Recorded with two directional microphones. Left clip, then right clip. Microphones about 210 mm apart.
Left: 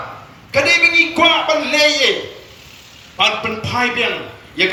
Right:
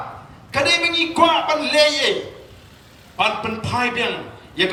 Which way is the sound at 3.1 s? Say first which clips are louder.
Left 4 dB; 60° right (ahead or behind).